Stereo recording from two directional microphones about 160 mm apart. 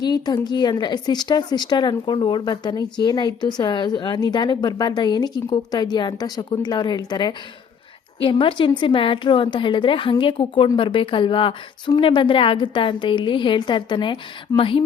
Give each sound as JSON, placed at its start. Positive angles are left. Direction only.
{"t": 0.0, "sound": "a woman's voice", "side_deg": 25}